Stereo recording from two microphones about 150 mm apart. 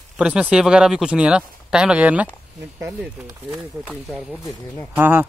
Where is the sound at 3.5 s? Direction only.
5° right (ahead or behind).